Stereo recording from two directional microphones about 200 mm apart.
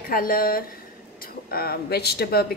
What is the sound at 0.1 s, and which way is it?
A woman's voice, 45° left (ahead or behind).